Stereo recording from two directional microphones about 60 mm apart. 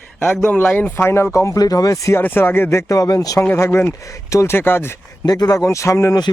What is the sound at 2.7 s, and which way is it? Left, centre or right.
Speech, left.